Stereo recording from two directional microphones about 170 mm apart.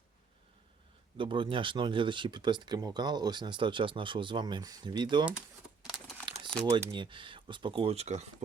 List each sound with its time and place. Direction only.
1.1 s speech: 30° right (ahead or behind)
6.3 s crumpling: 30° right (ahead or behind)
6.7 s speech: 15° right (ahead or behind)
6.9 s speech: 30° right (ahead or behind)